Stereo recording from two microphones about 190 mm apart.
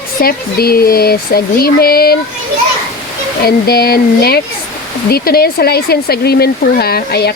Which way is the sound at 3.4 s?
55° left (ahead or behind).